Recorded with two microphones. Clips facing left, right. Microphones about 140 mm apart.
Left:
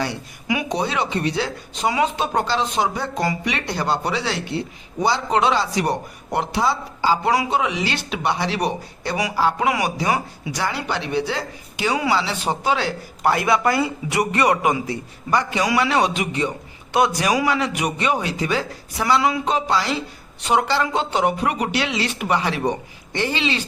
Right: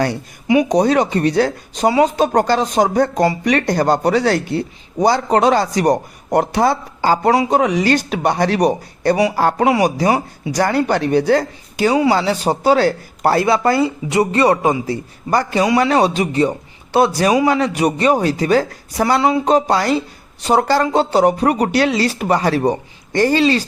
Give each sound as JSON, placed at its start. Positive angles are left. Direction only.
{"t": 0.4, "sound": "speech", "side_deg": -35}
{"t": 9.6, "sound": "speech", "side_deg": -35}
{"t": 10.6, "sound": "speech", "side_deg": -45}